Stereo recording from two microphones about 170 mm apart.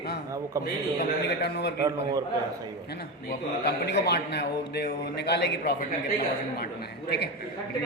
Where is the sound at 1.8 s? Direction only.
20° right (ahead or behind).